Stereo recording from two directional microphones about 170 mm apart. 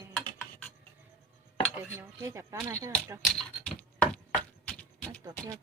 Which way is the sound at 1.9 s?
15° right (ahead or behind).